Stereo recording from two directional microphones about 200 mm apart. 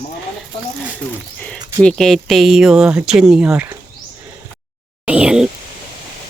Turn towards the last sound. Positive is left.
turn(degrees=-5)  # may be behind; listen again after turning